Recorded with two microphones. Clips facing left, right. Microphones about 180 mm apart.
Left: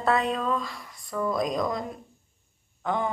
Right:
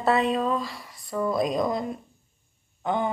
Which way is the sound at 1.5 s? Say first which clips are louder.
Right 2 dB; 25° right (ahead or behind).